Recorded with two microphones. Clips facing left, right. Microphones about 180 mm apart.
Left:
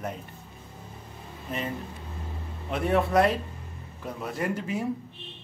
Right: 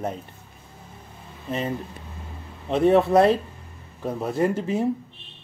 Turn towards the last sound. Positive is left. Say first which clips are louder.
# right 7 dB
turn(degrees=-30)  # may be behind; listen again after turning